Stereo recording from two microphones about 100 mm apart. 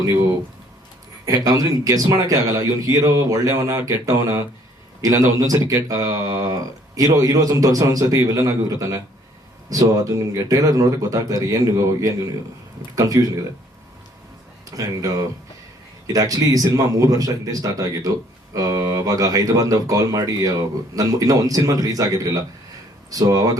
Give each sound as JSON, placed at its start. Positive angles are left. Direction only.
{"t": 1.5, "sound": "speech", "side_deg": -35}
{"t": 14.8, "sound": "speech", "side_deg": -35}